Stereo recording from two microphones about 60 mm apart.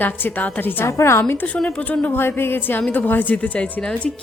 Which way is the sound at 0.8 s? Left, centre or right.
Left.